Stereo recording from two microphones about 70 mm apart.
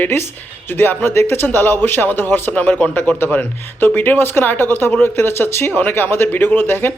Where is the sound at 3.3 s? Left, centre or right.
Left.